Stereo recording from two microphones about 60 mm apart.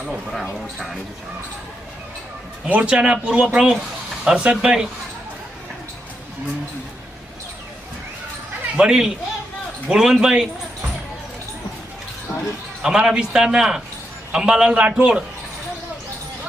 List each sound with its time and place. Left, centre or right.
0.0 s speech: centre
2.6 s speech: right
2.9 s a man's voice: centre
8.7 s a man's voice: centre
12.8 s a man's voice: centre